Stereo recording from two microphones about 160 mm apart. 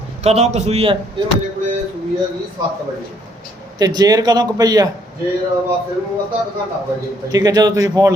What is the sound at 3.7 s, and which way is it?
A man's voice, 25° right (ahead or behind).